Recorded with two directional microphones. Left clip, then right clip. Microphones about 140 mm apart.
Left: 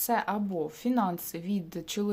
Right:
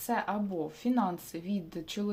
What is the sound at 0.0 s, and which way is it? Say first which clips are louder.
A woman's voice: left 3 dB; 25° left (ahead or behind).